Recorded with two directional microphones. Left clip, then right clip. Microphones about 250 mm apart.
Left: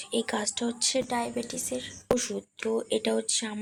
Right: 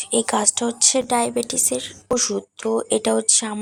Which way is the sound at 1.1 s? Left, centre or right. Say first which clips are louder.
Right 10 dB; right.